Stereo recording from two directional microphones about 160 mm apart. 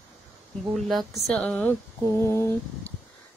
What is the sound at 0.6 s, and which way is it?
Speech, centre (ahead or behind).